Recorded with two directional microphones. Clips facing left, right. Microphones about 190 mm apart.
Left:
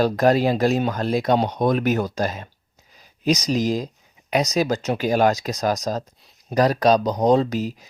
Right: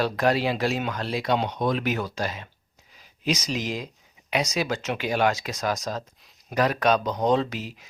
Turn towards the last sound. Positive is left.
turn(degrees=40)  # may be behind; listen again after turning